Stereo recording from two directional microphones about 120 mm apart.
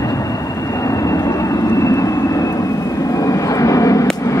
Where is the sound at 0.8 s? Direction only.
30° left (ahead or behind).